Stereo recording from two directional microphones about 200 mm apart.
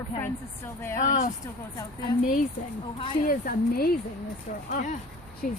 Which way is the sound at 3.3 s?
50° left (ahead or behind).